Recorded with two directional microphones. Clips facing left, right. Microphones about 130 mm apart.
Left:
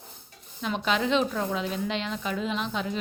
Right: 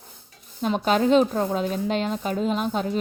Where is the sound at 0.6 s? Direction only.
45° right (ahead or behind).